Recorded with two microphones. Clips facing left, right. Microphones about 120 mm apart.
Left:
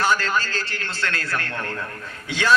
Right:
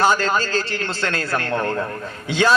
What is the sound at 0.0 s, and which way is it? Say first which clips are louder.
A man's voice: right 4 dB; 25° right (ahead or behind).